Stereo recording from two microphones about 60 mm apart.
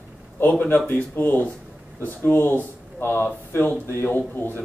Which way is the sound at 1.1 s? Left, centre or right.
Left.